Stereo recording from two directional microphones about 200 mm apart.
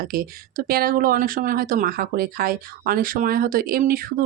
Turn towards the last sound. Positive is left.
turn(degrees=-45)  # may be behind; listen again after turning